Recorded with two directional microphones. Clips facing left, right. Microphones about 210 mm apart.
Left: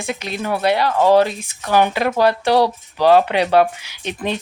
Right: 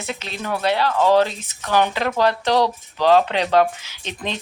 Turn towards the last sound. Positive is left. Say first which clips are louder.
# left 5 dB
turn(degrees=10)  # may be behind; listen again after turning